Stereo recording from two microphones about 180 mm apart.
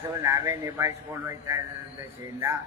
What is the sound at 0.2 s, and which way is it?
Speech, 15° right (ahead or behind).